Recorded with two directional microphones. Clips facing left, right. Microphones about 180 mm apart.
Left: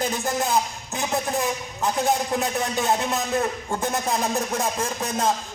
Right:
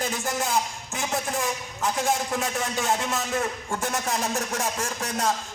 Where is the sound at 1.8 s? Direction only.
25° left (ahead or behind).